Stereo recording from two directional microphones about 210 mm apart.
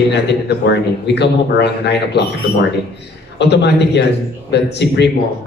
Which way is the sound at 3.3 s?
55° left (ahead or behind).